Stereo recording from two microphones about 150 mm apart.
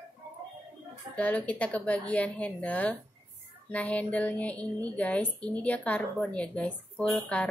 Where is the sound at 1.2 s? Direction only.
10° left (ahead or behind).